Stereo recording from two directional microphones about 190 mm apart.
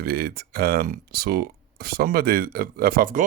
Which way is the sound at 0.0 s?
55° right (ahead or behind).